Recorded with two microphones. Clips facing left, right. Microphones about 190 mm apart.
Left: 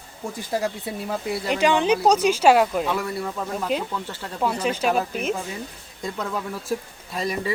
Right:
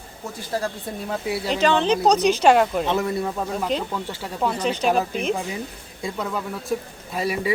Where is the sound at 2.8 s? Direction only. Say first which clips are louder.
Right 3 dB; 20° right (ahead or behind).